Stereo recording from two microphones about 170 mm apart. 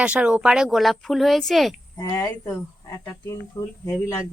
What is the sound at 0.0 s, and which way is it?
Speech, 5° right (ahead or behind).